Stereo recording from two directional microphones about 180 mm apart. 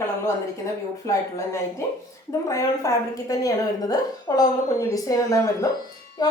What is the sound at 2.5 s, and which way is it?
A woman's voice, 20° left (ahead or behind).